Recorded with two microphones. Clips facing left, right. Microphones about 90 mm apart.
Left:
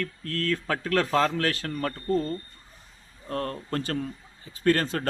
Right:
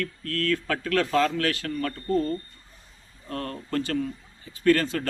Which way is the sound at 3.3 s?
35° left (ahead or behind).